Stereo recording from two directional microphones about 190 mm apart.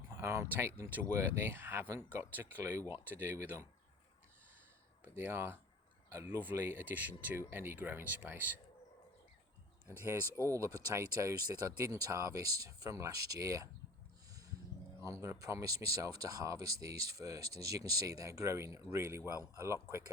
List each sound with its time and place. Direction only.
0.1 s speech: 15° right (ahead or behind)
5.0 s speech: 10° right (ahead or behind)
9.8 s speech: 15° right (ahead or behind)
15.0 s speech: 15° right (ahead or behind)